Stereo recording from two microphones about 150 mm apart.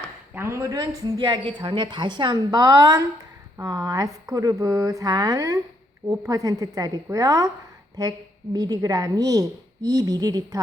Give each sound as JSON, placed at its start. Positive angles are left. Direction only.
{"t": 0.3, "sound": "speech", "side_deg": -15}
{"t": 8.5, "sound": "speech", "side_deg": -25}